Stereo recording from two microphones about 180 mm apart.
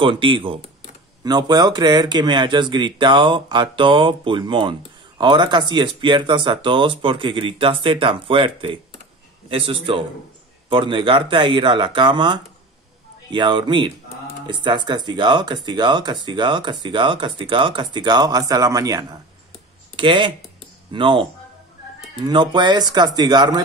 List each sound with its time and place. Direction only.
0.0 s speech: 30° right (ahead or behind)
10.7 s speech: 30° right (ahead or behind)